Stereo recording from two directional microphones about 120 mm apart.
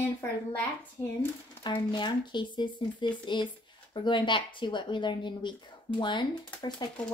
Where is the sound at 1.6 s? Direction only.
35° left (ahead or behind).